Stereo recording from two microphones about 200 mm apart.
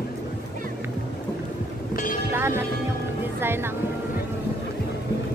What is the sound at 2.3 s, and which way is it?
Speech, 10° right (ahead or behind).